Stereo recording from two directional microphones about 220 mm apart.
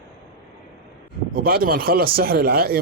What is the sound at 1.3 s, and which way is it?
Speech, 40° right (ahead or behind).